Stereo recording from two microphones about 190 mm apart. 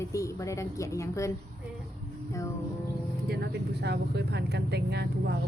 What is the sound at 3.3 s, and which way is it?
Speech, 60° right (ahead or behind).